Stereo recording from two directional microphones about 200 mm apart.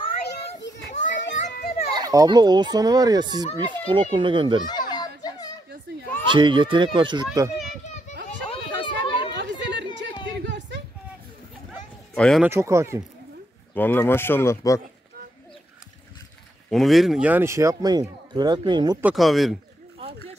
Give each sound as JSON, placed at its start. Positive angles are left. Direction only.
{"t": 0.0, "sound": "children playing", "side_deg": 35}
{"t": 1.6, "sound": "children playing", "side_deg": 50}
{"t": 2.0, "sound": "a child's voice", "side_deg": -20}
{"t": 4.6, "sound": "a sound", "side_deg": 20}
{"t": 6.2, "sound": "a child's voice", "side_deg": -25}
{"t": 8.5, "sound": "a sound", "side_deg": 25}
{"t": 9.3, "sound": "chatter", "side_deg": -60}
{"t": 12.1, "sound": "speech", "side_deg": 5}
{"t": 12.4, "sound": "speech", "side_deg": -15}
{"t": 13.7, "sound": "speech", "side_deg": 10}
{"t": 16.7, "sound": "speech", "side_deg": 0}
{"t": 19.0, "sound": "speech", "side_deg": 0}